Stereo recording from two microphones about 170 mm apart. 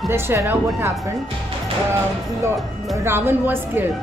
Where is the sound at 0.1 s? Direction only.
15° right (ahead or behind).